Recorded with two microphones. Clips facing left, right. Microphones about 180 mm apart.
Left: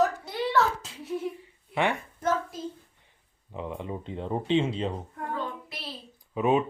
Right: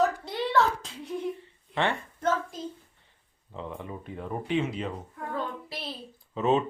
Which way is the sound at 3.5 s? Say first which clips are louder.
Left 3 dB; 15° left (ahead or behind).